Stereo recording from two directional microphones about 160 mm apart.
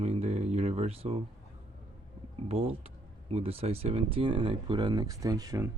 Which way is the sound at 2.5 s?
35° right (ahead or behind).